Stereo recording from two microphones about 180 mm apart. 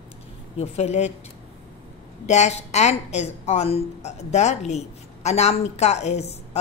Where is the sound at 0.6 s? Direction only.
40° left (ahead or behind).